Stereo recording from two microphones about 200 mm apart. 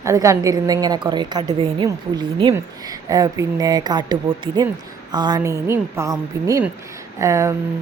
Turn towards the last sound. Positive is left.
turn(degrees=-15)  # may be behind; listen again after turning